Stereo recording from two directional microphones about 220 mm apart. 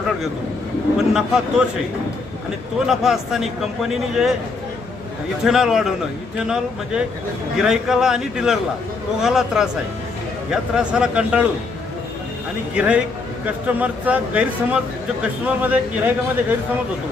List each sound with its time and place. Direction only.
0.9 s a man's voice: centre (ahead or behind)
2.8 s a man's voice: centre (ahead or behind)
5.4 s a man's voice: centre (ahead or behind)
12.7 s a man's voice: 5° right (ahead or behind)